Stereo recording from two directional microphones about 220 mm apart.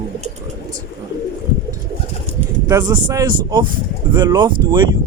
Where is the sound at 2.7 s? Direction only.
15° right (ahead or behind).